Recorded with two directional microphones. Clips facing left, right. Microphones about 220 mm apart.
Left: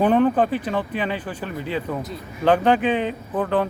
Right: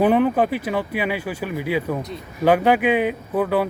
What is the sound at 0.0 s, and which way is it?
Speech, 10° right (ahead or behind).